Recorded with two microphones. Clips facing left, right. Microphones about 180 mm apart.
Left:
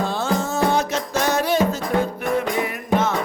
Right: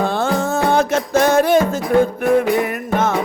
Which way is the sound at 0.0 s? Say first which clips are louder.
Right 4 dB; 60° right (ahead or behind).